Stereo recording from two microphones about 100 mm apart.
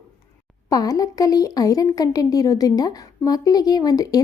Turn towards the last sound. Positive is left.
turn(degrees=40)  # may be behind; listen again after turning